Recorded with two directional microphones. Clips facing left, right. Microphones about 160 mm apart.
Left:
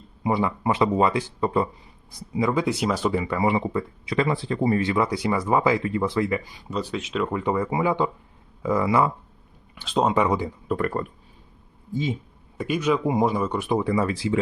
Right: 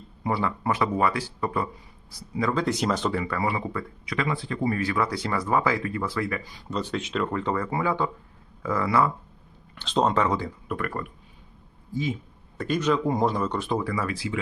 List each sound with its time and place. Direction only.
0.2 s speech: 15° left (ahead or behind)
3.1 s speech: 15° left (ahead or behind)
6.7 s speech: 5° left (ahead or behind)
9.7 s speech: 5° left (ahead or behind)
10.7 s speech: 25° left (ahead or behind)
12.5 s speech: 10° left (ahead or behind); by 14.4 s 30° left (ahead or behind)